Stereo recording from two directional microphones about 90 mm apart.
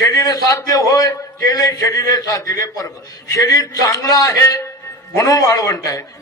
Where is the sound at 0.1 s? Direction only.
40° left (ahead or behind).